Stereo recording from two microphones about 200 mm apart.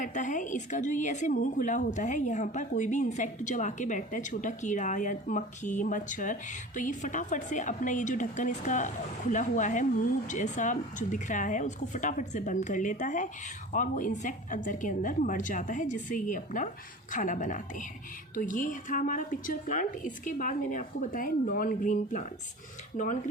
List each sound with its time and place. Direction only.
0.0 s a woman's voice: 40° left (ahead or behind)